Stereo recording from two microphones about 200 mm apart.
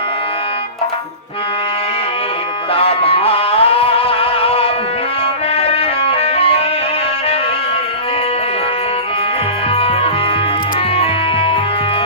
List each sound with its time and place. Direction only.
2.7 s music: 30° left (ahead or behind)
10.9 s music: 30° left (ahead or behind)